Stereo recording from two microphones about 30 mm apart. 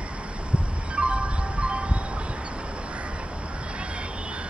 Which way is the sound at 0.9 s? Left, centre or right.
Right.